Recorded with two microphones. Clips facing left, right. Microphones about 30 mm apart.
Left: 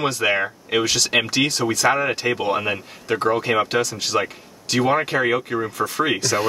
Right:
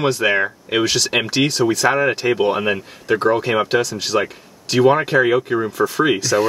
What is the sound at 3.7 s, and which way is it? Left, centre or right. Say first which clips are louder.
Speech: right 3 dB; centre.